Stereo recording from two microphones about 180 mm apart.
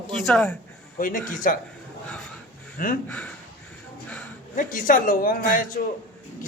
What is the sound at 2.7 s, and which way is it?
Speech, 50° left (ahead or behind).